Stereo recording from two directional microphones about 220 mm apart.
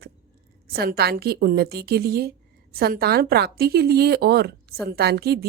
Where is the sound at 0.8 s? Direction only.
45° right (ahead or behind).